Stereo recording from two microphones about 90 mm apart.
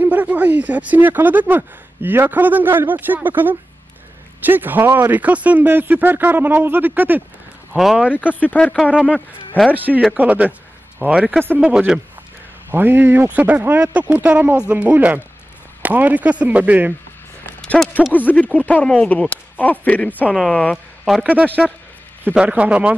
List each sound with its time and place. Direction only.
0.0 s speech: 15° right (ahead or behind)
7.7 s speech: 5° right (ahead or behind)
8.3 s speech: 20° left (ahead or behind)
9.8 s speech: 20° right (ahead or behind)
12.7 s speech: 20° right (ahead or behind)
17.6 s a sound: 10° left (ahead or behind)
18.1 s speech: 20° left (ahead or behind)
20.3 s speech: 5° left (ahead or behind); by 22.9 s 15° right (ahead or behind)